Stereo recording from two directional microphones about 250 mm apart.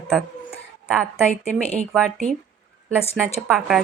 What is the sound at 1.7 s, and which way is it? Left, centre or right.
Speech, centre.